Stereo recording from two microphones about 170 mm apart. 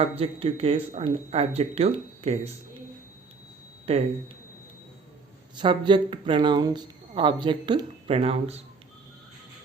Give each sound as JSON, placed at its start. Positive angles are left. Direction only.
{"t": 0.0, "sound": "speech", "side_deg": -35}
{"t": 3.9, "sound": "speech", "side_deg": -35}
{"t": 5.5, "sound": "speech", "side_deg": -25}